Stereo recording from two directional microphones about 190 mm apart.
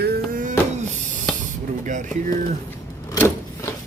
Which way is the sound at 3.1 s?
10° left (ahead or behind).